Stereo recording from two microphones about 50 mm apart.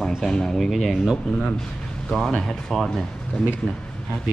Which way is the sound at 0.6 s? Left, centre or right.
Centre.